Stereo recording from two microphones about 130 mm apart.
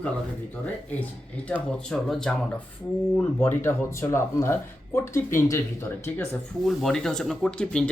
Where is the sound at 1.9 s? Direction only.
Centre (ahead or behind).